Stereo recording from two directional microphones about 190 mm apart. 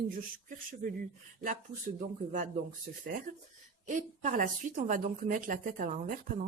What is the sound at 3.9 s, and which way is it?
A woman's voice, 40° right (ahead or behind).